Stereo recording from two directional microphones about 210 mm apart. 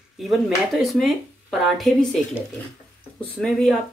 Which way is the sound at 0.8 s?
Centre (ahead or behind).